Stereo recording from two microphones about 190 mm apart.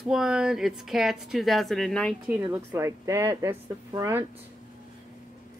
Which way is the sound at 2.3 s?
15° right (ahead or behind).